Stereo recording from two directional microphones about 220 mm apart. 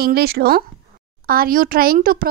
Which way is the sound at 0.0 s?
45° right (ahead or behind).